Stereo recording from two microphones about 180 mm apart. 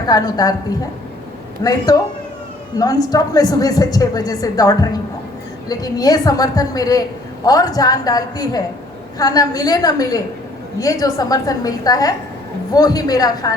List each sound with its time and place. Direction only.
0.1 s a woman's voice: 20° left (ahead or behind)
1.6 s a man's voice: 15° left (ahead or behind)